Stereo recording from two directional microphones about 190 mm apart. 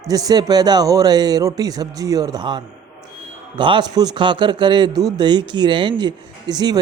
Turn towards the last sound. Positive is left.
turn(degrees=-20)  # may be behind; listen again after turning